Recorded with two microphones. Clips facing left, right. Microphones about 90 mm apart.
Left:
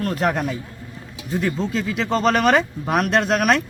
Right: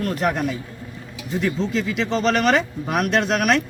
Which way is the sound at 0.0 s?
40° left (ahead or behind).